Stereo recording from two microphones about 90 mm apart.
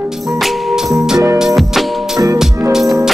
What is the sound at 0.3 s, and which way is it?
Music, centre (ahead or behind).